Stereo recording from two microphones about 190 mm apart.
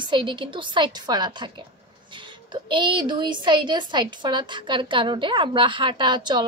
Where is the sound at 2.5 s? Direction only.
25° right (ahead or behind).